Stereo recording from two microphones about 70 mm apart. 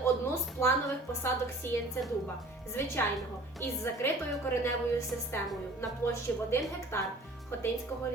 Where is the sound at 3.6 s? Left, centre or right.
Left.